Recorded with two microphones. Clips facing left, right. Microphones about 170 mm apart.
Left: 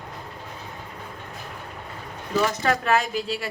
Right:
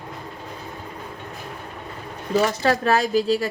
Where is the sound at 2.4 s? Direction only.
35° right (ahead or behind).